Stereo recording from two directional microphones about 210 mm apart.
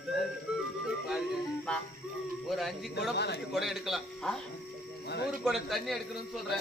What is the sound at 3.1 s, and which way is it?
Speech, 55° left (ahead or behind).